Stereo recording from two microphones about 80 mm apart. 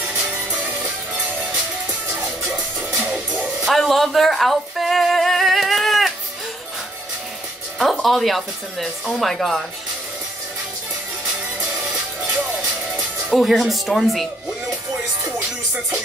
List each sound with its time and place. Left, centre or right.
0.5 s music: right
3.6 s a sound: centre
7.8 s speech: centre
12.9 s speech: centre
15.3 s music: right